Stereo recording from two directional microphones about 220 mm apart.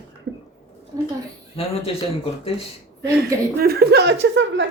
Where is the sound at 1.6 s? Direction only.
25° left (ahead or behind).